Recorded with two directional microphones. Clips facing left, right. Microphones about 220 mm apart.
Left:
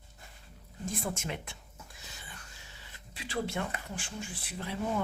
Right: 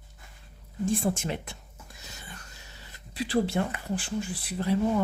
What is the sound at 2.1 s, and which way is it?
Whispering, 40° right (ahead or behind).